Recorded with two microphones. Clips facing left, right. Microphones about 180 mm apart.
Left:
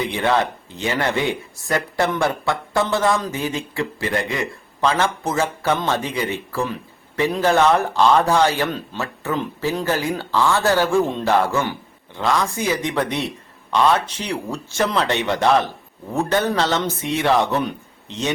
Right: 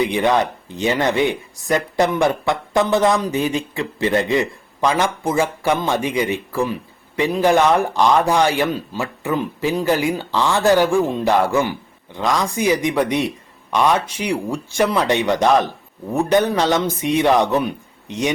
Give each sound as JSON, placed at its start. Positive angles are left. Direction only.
{"t": 0.0, "sound": "speech", "side_deg": -15}